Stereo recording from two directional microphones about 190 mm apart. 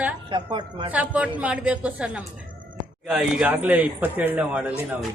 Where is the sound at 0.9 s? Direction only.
10° right (ahead or behind).